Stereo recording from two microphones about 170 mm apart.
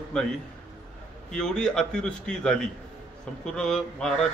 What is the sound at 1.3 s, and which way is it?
A man's voice, 5° left (ahead or behind).